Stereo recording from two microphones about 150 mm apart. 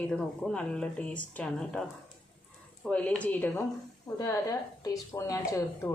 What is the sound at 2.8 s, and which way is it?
A woman's voice, 10° left (ahead or behind).